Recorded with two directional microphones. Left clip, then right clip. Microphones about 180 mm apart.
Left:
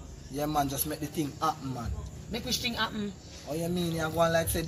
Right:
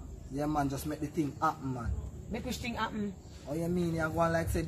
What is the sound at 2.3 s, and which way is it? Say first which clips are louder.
Speech: left 6 dB; 15° right (ahead or behind).